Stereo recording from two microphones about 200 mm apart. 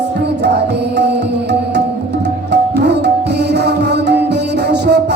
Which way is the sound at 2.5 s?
55° right (ahead or behind).